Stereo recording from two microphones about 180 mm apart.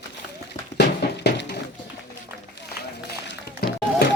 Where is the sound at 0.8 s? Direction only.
65° left (ahead or behind).